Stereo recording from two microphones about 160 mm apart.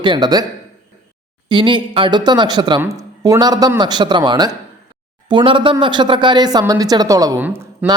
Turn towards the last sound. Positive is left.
turn(degrees=-10)  # may be behind; listen again after turning